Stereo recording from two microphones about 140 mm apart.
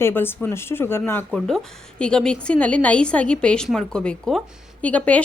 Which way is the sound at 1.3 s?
5° left (ahead or behind).